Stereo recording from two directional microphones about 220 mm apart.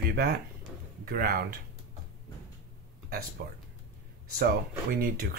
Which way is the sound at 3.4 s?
45° right (ahead or behind).